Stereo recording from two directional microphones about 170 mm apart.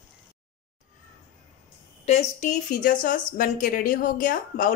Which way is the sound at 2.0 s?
40° left (ahead or behind).